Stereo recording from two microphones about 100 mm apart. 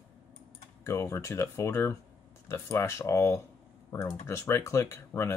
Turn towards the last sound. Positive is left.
turn(degrees=30)  # may be behind; listen again after turning